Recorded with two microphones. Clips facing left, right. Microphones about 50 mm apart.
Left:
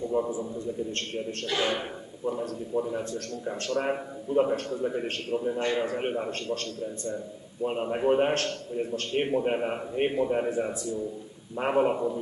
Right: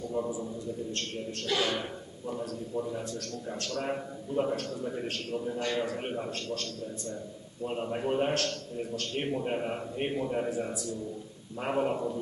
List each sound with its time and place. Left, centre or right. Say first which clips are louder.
0.0 s a man's voice: left 5 dB; left
7.6 s a man's voice: left 6 dB; left
11.7 s a man's voice: left 4 dB; centre